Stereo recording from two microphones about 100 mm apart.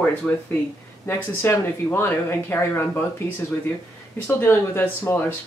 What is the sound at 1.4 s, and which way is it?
Speech, 25° left (ahead or behind).